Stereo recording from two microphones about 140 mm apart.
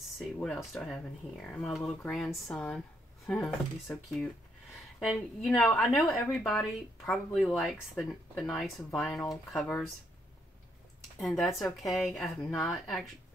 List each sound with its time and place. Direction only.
0.2 s speech: centre (ahead or behind)
11.1 s speech: centre (ahead or behind)